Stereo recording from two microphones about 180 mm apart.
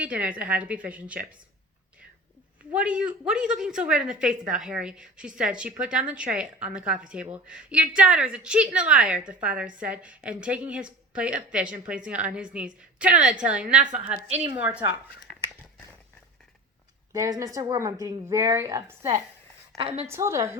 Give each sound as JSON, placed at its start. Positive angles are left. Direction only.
{"t": 0.0, "sound": "a woman's voice", "side_deg": -5}
{"t": 2.7, "sound": "a woman's voice", "side_deg": -5}
{"t": 17.1, "sound": "a woman's voice", "side_deg": -20}